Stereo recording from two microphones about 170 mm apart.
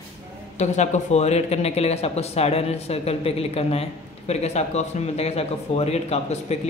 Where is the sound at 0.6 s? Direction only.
45° left (ahead or behind).